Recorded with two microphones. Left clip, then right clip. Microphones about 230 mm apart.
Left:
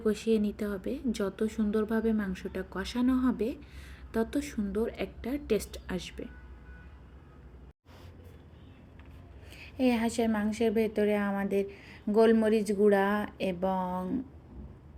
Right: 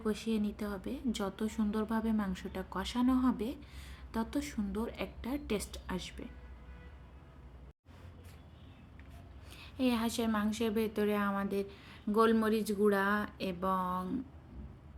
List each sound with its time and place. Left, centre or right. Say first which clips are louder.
0.0 s a woman's voice: left 8 dB; centre
9.7 s a woman's voice: left 5 dB; centre